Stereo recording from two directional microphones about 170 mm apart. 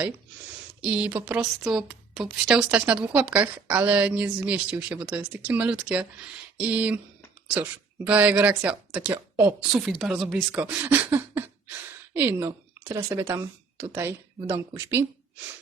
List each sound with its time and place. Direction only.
0.8 s a woman's voice: 10° right (ahead or behind)